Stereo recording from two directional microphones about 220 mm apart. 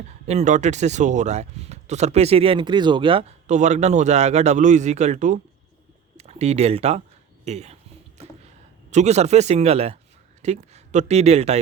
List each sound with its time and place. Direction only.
0.3 s speech: 30° right (ahead or behind)
8.2 s a sound: 30° right (ahead or behind)
8.9 s speech: 30° right (ahead or behind)